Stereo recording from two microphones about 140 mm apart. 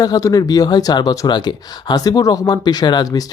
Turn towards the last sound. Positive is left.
turn(degrees=25)  # may be behind; listen again after turning